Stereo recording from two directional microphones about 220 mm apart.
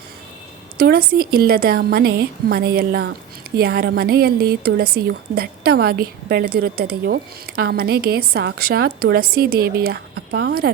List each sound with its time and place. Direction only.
0.8 s a woman's voice: 45° right (ahead or behind)